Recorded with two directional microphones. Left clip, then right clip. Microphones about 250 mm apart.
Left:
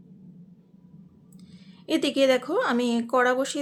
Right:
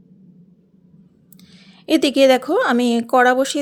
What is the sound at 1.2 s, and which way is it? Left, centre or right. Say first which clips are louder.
Speech: right 7 dB; right.